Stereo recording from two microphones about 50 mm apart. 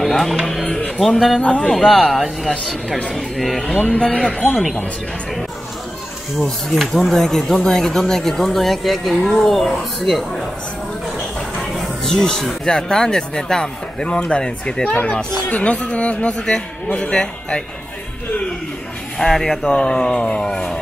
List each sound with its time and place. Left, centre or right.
0.0 s speech: centre
1.4 s speech: left
1.9 s speech: centre
3.7 s speech: left
6.4 s speech: centre
11.7 s music: centre
12.1 s speech: centre
14.9 s speech: left
19.1 s speech: centre